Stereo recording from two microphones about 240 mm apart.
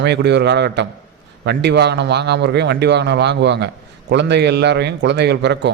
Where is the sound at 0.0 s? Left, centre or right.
Right.